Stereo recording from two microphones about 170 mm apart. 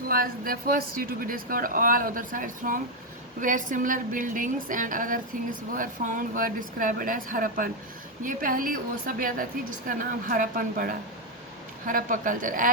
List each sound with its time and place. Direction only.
0.1 s a woman's voice: 60° right (ahead or behind)